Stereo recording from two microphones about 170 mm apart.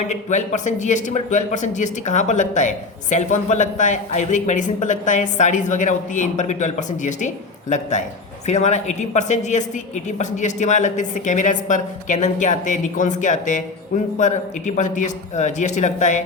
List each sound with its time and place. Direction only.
0.1 s a man's voice: 45° left (ahead or behind)